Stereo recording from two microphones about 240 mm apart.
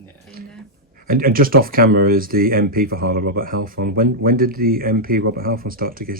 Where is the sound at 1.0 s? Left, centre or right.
Right.